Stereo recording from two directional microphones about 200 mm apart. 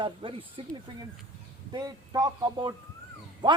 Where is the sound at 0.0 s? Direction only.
25° right (ahead or behind).